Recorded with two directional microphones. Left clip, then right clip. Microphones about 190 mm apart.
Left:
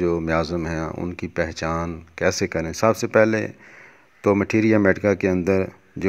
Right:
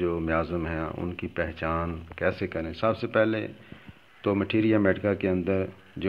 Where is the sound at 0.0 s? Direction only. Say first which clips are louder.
Left 5 dB; 40° left (ahead or behind).